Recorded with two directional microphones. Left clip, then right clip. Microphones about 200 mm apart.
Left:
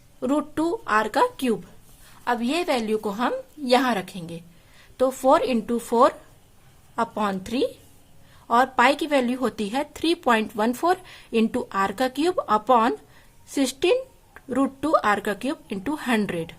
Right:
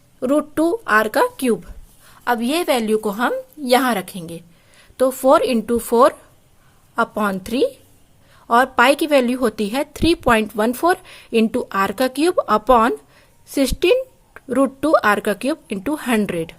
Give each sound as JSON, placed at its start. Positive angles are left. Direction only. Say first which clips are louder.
{"t": 0.2, "sound": "a woman's voice", "louder": "right 6 dB", "side_deg": -20}